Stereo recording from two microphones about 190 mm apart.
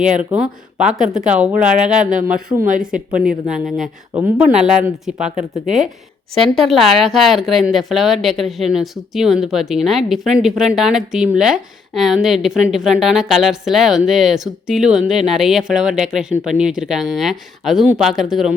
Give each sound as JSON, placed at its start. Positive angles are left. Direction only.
{"t": 0.2, "sound": "speech", "side_deg": -5}
{"t": 2.5, "sound": "speech", "side_deg": -20}
{"t": 2.8, "sound": "speech", "side_deg": -5}
{"t": 6.3, "sound": "speech", "side_deg": 0}